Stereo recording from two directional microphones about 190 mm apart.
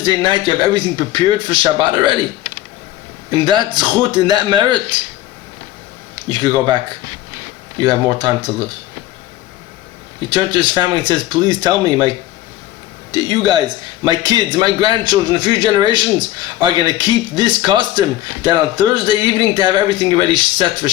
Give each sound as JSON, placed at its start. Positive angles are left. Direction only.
{"t": 0.0, "sound": "a man's voice", "side_deg": -25}
{"t": 3.2, "sound": "a man's voice", "side_deg": -25}
{"t": 6.3, "sound": "a man's voice", "side_deg": -25}
{"t": 10.2, "sound": "a man's voice", "side_deg": -25}